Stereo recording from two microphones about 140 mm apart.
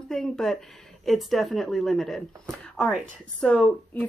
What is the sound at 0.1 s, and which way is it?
A woman's voice, 5° left (ahead or behind).